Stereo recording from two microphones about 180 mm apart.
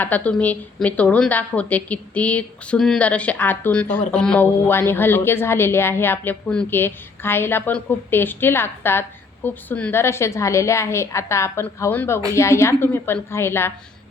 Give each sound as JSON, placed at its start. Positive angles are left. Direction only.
{"t": 0.0, "sound": "a woman's voice", "side_deg": 10}